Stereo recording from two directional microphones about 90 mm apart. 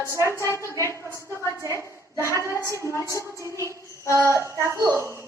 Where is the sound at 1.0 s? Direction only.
30° right (ahead or behind).